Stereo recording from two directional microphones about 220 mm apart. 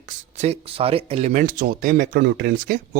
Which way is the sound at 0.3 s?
30° right (ahead or behind).